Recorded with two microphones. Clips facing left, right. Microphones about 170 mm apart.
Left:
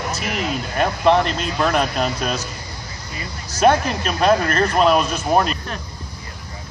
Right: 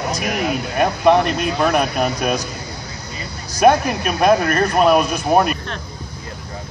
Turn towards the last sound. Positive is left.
turn(degrees=-10)  # may be behind; listen again after turning